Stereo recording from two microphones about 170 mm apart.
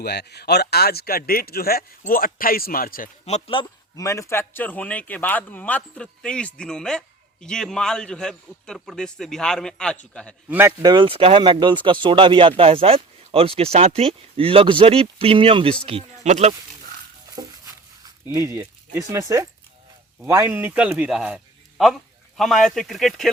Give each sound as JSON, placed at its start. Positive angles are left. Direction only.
{"t": 0.0, "sound": "speech", "side_deg": 75}
{"t": 3.2, "sound": "a man's voice", "side_deg": 35}
{"t": 10.5, "sound": "speech", "side_deg": -10}
{"t": 10.8, "sound": "speech", "side_deg": -30}
{"t": 18.3, "sound": "a man's voice", "side_deg": -15}